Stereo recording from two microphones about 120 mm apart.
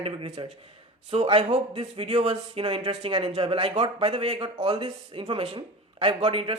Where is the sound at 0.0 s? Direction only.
45° right (ahead or behind).